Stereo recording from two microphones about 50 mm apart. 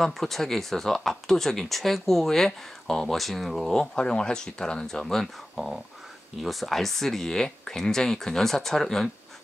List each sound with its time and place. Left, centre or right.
0.0 s speech: centre